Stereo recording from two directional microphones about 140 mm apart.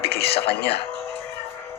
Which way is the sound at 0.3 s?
45° left (ahead or behind).